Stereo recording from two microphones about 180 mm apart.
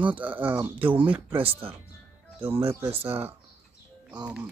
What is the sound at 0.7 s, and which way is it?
Speech, 30° right (ahead or behind).